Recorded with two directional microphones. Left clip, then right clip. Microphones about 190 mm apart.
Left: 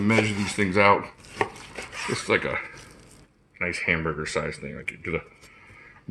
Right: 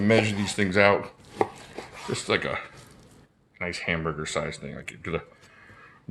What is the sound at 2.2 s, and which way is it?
Speech, 25° right (ahead or behind).